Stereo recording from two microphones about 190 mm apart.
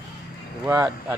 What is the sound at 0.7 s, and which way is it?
Speech, 15° right (ahead or behind).